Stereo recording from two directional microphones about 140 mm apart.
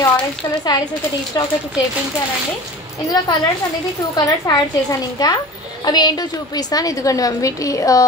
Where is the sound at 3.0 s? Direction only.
30° left (ahead or behind).